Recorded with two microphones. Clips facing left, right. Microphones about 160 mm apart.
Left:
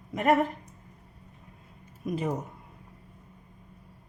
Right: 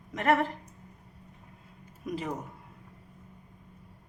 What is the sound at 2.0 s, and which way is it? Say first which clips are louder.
Speech: left 4 dB; 20° left (ahead or behind).